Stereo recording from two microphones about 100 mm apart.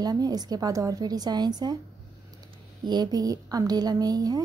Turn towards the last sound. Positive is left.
turn(degrees=-40)  # may be behind; listen again after turning